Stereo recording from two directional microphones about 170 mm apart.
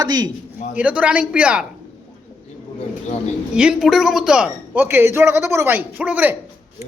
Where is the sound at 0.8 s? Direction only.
10° right (ahead or behind).